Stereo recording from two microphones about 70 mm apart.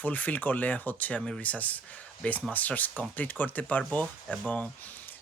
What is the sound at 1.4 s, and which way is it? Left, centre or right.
Speech, left.